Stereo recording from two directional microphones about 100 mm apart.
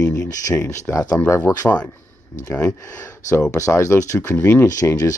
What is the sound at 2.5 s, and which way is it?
Speech, 30° left (ahead or behind).